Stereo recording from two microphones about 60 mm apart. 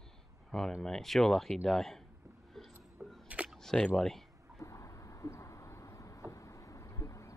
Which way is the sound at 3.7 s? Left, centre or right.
Centre.